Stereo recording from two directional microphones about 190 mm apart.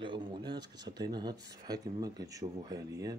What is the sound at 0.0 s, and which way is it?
Speech, 25° right (ahead or behind).